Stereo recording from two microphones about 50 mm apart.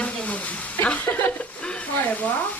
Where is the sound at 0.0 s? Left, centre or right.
Left.